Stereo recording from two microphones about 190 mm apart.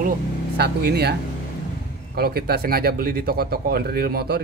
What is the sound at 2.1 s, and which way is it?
Speech, 55° right (ahead or behind).